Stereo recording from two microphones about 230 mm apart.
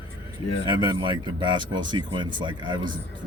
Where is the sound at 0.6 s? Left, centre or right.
Centre.